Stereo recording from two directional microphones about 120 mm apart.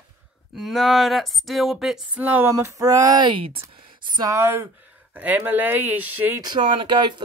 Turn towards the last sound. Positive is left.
turn(degrees=-40)  # may be behind; listen again after turning